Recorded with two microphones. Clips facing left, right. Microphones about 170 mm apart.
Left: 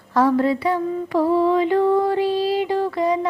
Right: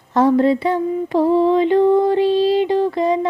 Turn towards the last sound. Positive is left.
turn(degrees=-25)  # may be behind; listen again after turning